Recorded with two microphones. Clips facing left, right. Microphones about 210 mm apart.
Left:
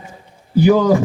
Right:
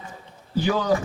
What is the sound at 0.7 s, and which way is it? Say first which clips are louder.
Speech: left 9 dB; 45° left (ahead or behind).